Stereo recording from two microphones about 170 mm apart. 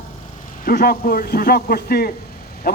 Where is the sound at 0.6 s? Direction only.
60° left (ahead or behind).